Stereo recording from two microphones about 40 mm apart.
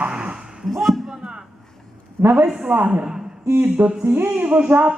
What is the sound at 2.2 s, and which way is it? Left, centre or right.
Speech, right.